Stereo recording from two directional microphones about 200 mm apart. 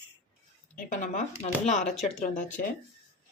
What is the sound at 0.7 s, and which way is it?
Speech, 35° left (ahead or behind).